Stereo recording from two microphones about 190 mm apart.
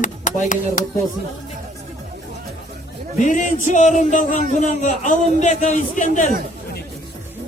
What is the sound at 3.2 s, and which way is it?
A man's voice, 40° left (ahead or behind).